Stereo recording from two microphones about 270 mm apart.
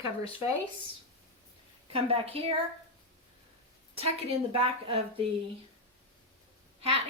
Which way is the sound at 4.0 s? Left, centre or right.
Right.